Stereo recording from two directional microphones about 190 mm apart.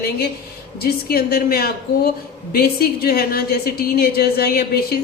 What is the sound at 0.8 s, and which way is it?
A woman's voice, 55° left (ahead or behind).